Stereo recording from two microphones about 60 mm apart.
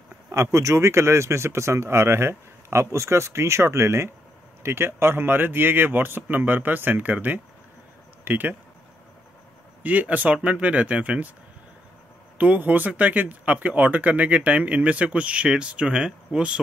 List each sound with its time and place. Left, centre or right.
0.3 s speech: right
9.8 s speech: right
12.4 s speech: right